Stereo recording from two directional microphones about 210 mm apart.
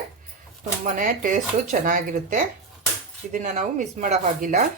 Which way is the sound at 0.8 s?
40° right (ahead or behind).